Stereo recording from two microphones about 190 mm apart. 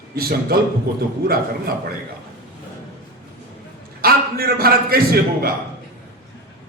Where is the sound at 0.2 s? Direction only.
50° right (ahead or behind).